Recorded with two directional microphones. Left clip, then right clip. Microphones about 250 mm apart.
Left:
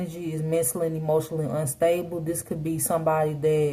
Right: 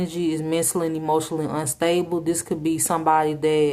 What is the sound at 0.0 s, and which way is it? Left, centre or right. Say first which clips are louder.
Speech: right 8 dB; right.